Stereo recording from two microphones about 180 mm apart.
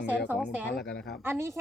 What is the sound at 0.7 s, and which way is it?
Speech, 70° left (ahead or behind).